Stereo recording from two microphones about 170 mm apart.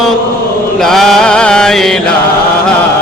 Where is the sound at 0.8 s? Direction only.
Centre (ahead or behind).